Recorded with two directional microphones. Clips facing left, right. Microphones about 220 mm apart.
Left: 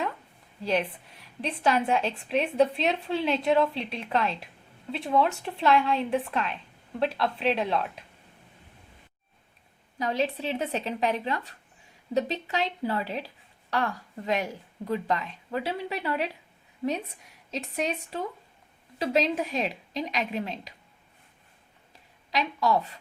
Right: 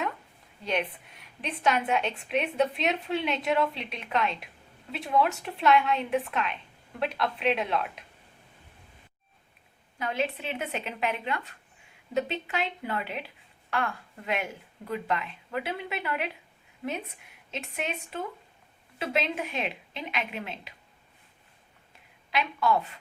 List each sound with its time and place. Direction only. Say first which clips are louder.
0.6 s a woman's voice: left 3 dB; 30° left (ahead or behind)
10.0 s a woman's voice: left 3 dB; 35° left (ahead or behind)
17.5 s a woman's voice: left 4 dB; 35° left (ahead or behind)
21.9 s a woman's voice: left 1 dB; 35° left (ahead or behind)